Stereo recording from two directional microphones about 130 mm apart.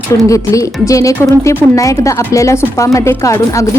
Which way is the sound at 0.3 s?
25° left (ahead or behind).